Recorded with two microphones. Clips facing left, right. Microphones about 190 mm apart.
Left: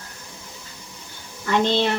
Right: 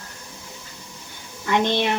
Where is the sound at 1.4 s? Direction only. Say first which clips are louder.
Left 1 dB; 15° right (ahead or behind).